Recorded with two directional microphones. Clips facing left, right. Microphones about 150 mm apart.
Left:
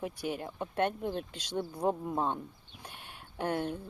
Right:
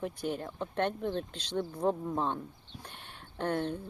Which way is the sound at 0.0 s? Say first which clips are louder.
Right 1 dB; 10° left (ahead or behind).